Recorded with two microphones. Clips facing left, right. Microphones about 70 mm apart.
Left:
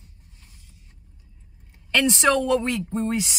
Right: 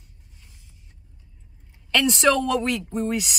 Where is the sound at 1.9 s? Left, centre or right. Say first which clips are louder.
Even; centre.